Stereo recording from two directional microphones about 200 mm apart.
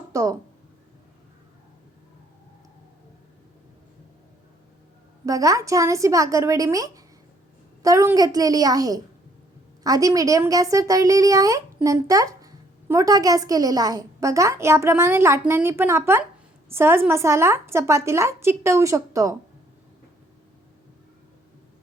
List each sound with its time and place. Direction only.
0.1 s speech: 15° right (ahead or behind)
5.2 s speech: 15° right (ahead or behind)